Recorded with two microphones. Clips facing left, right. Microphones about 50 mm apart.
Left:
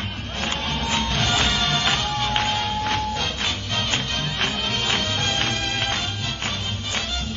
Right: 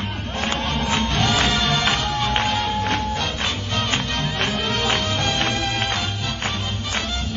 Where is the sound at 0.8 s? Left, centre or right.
Right.